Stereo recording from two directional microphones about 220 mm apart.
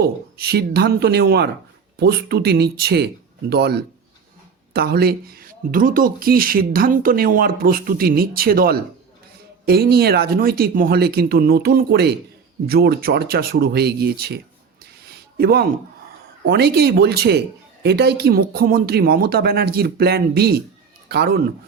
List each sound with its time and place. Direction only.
0.0 s speech: 45° right (ahead or behind)
15.0 s a sound: 45° right (ahead or behind)
16.5 s speech: 50° right (ahead or behind)